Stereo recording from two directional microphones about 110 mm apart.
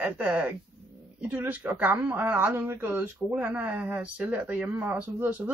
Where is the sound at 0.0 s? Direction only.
10° right (ahead or behind).